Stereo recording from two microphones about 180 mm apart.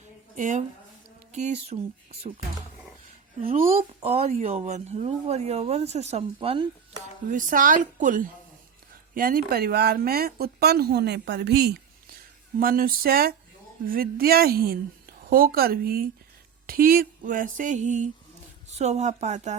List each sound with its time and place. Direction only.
0.3 s speech: 45° right (ahead or behind)
3.5 s speech: 35° right (ahead or behind)
7.3 s a sound: 50° right (ahead or behind)
9.1 s speech: 55° right (ahead or behind)
12.5 s speech: 55° right (ahead or behind)
16.6 s a sound: 55° right (ahead or behind)
18.7 s speech: 40° right (ahead or behind)